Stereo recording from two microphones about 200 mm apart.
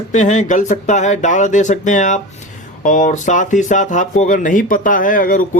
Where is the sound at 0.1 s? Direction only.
40° left (ahead or behind).